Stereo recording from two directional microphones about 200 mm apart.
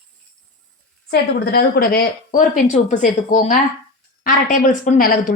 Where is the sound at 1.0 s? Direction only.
50° left (ahead or behind).